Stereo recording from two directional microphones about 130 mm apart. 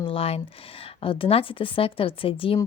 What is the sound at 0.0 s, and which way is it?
Speech, 45° left (ahead or behind).